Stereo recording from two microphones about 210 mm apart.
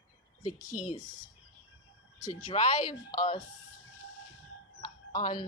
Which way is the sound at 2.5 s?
25° left (ahead or behind).